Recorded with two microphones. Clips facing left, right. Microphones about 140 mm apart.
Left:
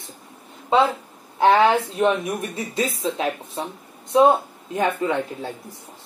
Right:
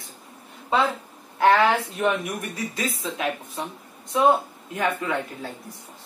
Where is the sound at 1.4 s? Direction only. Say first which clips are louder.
Left 2 dB; 25° left (ahead or behind).